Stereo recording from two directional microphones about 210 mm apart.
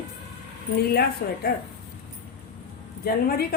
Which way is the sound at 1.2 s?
50° left (ahead or behind).